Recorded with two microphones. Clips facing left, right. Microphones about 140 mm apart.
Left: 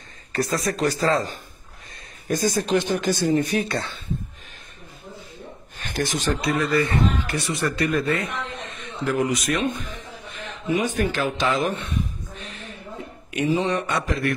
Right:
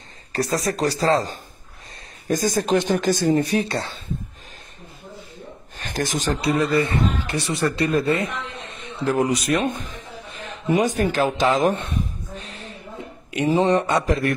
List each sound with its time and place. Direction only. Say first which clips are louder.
0.3 s speech: right 1 dB; 35° right (ahead or behind)
5.8 s speech: right 1 dB; 40° right (ahead or behind)
13.6 s speech: right 5 dB; 35° right (ahead or behind)